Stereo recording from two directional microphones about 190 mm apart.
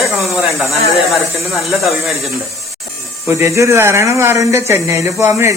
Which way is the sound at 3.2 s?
15° right (ahead or behind).